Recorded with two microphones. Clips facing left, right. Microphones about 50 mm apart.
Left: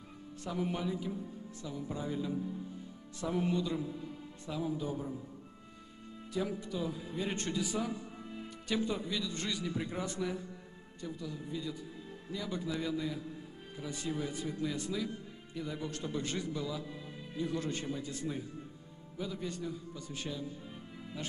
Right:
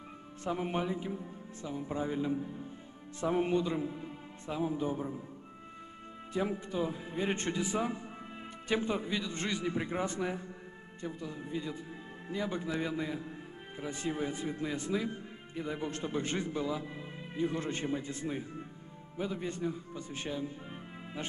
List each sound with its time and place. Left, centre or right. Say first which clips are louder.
0.4 s speech: right 3 dB; right
6.3 s speech: right 3 dB; right